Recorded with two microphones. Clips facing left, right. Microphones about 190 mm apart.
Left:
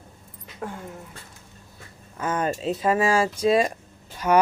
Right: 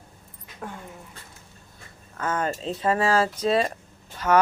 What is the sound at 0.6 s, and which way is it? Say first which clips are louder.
Speech: left 3 dB; 5° left (ahead or behind).